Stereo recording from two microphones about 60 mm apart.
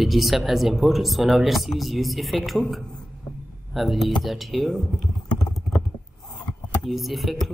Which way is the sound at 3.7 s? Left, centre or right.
Centre.